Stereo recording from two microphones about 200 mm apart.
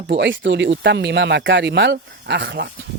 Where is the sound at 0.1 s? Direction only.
60° right (ahead or behind).